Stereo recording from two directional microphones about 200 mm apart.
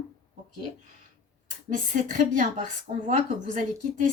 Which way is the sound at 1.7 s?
40° right (ahead or behind).